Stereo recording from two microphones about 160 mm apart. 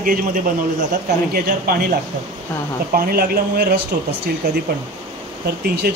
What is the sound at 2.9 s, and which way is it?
Speech, 65° right (ahead or behind).